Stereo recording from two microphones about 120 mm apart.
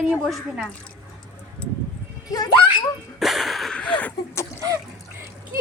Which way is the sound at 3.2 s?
Centre (ahead or behind).